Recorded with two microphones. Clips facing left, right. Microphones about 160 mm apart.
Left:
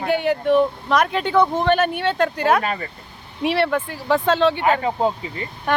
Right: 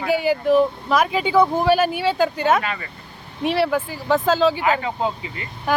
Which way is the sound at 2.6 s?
35° left (ahead or behind).